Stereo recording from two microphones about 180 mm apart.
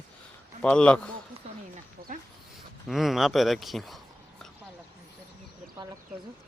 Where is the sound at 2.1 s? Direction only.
45° right (ahead or behind).